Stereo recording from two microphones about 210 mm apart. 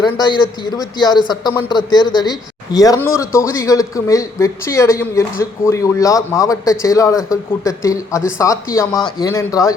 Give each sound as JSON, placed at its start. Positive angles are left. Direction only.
{"t": 0.0, "sound": "a man's voice", "side_deg": 20}